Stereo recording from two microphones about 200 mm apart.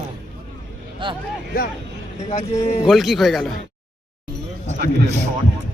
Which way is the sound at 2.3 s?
30° left (ahead or behind).